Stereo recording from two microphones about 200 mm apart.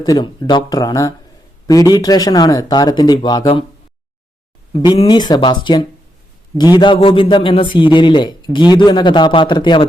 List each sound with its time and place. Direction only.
0.0 s a man's voice: 20° left (ahead or behind)
4.8 s a man's voice: 20° left (ahead or behind)